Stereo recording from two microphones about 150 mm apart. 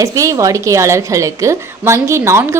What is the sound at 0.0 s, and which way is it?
A woman's voice, 20° right (ahead or behind).